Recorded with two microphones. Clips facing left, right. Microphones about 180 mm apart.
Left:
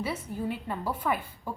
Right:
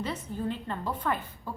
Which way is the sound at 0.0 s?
10° left (ahead or behind).